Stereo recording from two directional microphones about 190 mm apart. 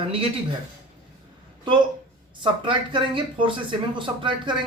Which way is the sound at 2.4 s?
25° right (ahead or behind).